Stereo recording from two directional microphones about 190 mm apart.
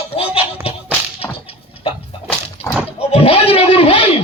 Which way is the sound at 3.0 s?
30° left (ahead or behind).